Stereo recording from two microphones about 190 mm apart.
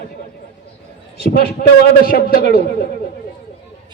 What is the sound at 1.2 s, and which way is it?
A man's voice, 55° left (ahead or behind).